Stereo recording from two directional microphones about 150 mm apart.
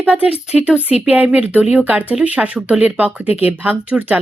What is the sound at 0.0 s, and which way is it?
Speech, 10° right (ahead or behind).